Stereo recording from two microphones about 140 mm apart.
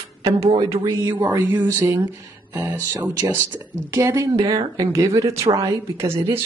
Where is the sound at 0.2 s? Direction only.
45° right (ahead or behind).